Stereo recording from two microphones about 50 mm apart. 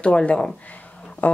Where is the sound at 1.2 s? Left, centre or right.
Left.